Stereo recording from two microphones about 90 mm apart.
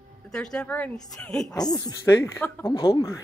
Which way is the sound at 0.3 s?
5° left (ahead or behind).